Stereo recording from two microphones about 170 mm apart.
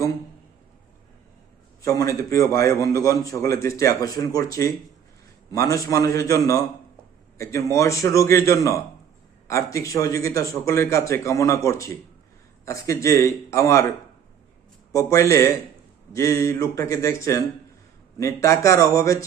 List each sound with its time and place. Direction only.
1.8 s a man's voice: 20° left (ahead or behind)
14.9 s a man's voice: 20° left (ahead or behind)